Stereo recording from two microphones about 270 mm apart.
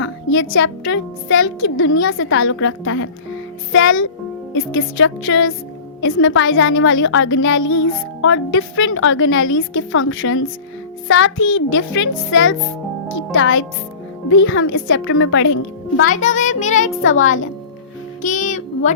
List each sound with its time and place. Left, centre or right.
0.0 s speech: left
16.0 s music: left
17.0 s speech: left
18.2 s music: left